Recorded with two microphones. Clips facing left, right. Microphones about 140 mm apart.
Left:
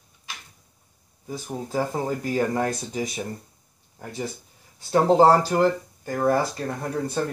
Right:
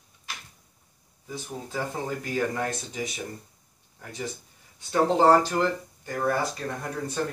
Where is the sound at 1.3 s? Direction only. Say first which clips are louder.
Left 6 dB; 40° left (ahead or behind).